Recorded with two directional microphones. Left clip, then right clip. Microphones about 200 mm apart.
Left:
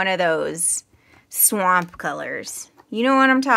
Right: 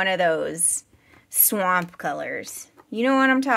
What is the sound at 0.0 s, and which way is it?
Speech, 5° left (ahead or behind).